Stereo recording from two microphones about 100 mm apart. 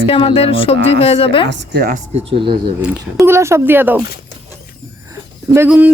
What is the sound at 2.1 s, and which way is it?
Speech, 60° right (ahead or behind).